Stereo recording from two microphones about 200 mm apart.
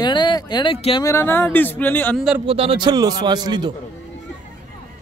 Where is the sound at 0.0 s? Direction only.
20° left (ahead or behind).